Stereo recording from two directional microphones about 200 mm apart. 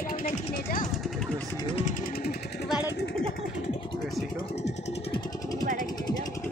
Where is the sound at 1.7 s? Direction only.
30° left (ahead or behind).